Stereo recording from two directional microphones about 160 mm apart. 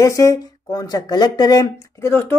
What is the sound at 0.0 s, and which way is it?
Speech, 20° left (ahead or behind).